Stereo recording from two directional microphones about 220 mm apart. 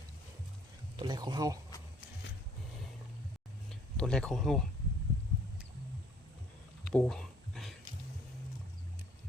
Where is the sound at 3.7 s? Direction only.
5° left (ahead or behind).